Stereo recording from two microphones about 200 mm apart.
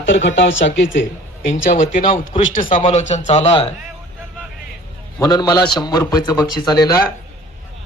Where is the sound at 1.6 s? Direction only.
40° left (ahead or behind).